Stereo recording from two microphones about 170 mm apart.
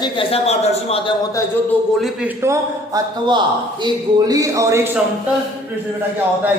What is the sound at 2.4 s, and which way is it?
A man's voice, 20° right (ahead or behind).